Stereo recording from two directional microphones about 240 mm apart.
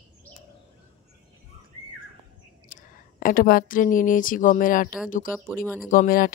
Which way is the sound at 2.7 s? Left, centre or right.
Left.